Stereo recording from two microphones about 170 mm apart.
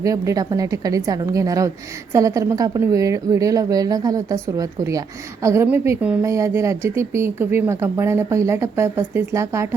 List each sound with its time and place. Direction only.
0.0 s a woman's voice: 20° right (ahead or behind)